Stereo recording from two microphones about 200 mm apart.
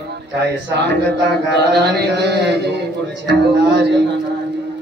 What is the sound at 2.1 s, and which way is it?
A man's voice, 55° right (ahead or behind).